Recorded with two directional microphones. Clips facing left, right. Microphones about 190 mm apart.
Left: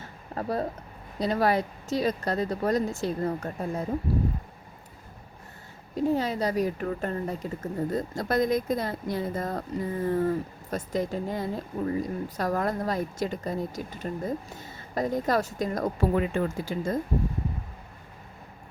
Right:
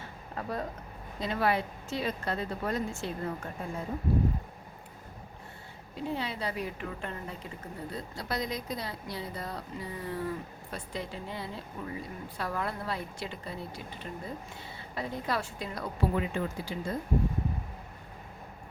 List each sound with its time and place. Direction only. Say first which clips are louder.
0.3 s speech: left 6 dB; 35° left (ahead or behind)
5.9 s speech: left 9 dB; 40° left (ahead or behind)